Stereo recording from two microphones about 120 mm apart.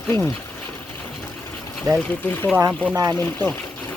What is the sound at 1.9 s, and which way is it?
Speech, 30° right (ahead or behind).